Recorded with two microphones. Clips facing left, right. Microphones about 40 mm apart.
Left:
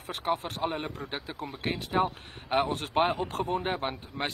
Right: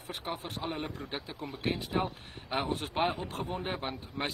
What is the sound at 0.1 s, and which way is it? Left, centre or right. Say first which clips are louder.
Speech: left 7 dB; left.